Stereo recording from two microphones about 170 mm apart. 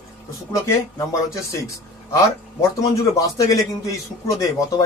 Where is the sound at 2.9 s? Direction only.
20° left (ahead or behind).